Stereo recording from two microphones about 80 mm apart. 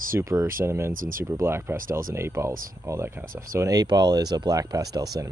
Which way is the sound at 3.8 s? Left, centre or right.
Right.